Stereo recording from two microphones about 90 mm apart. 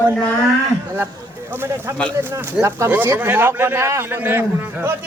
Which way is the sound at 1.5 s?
25° right (ahead or behind).